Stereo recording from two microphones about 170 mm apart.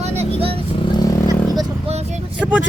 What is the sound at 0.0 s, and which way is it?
Vehicle, 35° right (ahead or behind).